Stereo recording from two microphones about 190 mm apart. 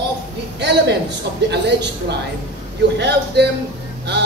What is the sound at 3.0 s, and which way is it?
Speech, 60° right (ahead or behind).